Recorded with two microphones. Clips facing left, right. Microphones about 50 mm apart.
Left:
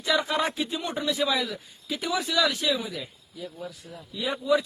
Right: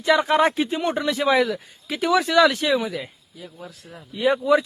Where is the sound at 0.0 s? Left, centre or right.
Right.